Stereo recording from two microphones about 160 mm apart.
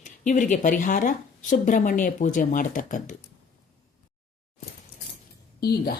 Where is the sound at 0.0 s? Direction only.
50° left (ahead or behind).